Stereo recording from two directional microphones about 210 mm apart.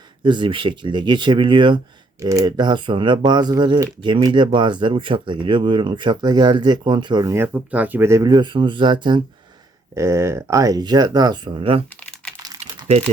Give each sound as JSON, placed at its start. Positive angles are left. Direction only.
{"t": 0.2, "sound": "speech", "side_deg": -20}